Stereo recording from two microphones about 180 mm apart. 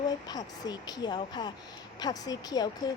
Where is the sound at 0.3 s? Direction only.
20° left (ahead or behind).